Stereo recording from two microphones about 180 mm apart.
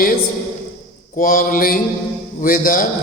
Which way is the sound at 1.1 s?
50° left (ahead or behind).